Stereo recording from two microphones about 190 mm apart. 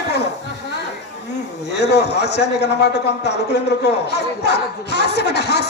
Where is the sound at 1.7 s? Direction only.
60° left (ahead or behind).